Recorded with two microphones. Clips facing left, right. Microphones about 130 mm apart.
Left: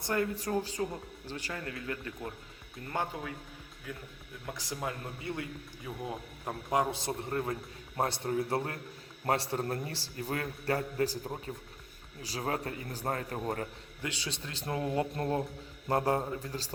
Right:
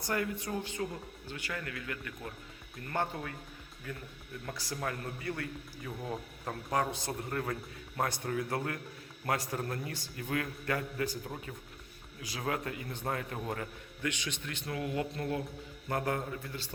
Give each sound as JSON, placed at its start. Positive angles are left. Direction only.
{"t": 0.0, "sound": "a man's voice", "side_deg": 30}
{"t": 2.9, "sound": "speech", "side_deg": 10}
{"t": 4.5, "sound": "a man's voice", "side_deg": 20}